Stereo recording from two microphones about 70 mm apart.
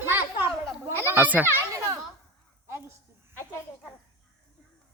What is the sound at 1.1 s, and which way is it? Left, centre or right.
Speech, right.